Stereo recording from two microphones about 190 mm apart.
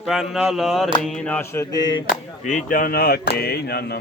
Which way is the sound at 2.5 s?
40° left (ahead or behind).